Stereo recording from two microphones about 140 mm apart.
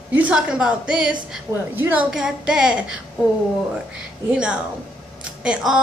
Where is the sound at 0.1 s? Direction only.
10° right (ahead or behind).